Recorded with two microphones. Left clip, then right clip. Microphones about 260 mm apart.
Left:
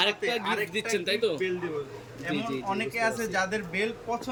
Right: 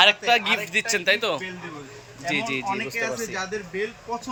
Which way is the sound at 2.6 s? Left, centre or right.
Left.